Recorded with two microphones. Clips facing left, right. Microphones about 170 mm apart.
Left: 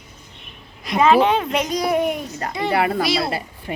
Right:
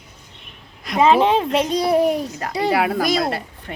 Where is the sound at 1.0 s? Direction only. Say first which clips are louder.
Even; 30° right (ahead or behind).